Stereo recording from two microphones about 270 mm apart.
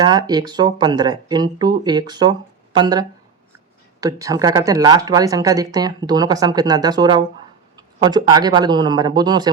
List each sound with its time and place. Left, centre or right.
0.0 s speech: centre